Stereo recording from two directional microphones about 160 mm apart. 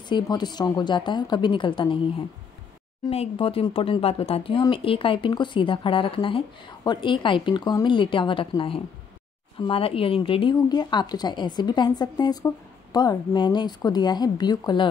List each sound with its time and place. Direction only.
0.1 s speech: 25° left (ahead or behind)